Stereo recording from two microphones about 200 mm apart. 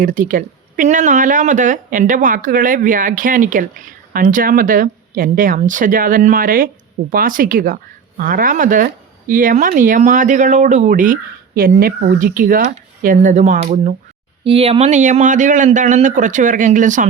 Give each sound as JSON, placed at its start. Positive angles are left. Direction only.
{"t": 0.0, "sound": "speech", "side_deg": -40}